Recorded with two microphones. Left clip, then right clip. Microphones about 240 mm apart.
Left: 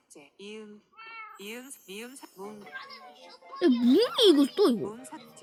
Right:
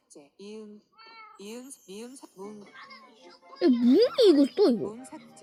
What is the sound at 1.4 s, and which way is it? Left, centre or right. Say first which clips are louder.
Speech: left 1 dB; centre.